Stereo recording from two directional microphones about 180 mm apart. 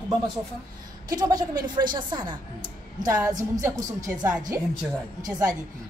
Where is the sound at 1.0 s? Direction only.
20° right (ahead or behind).